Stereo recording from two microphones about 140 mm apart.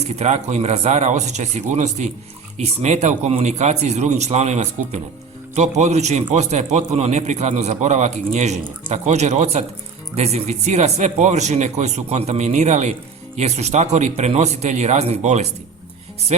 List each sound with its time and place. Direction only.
0.0 s a man's voice: 50° right (ahead or behind)